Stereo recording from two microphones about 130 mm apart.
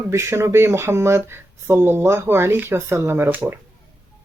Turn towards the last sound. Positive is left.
turn(degrees=-15)  # may be behind; listen again after turning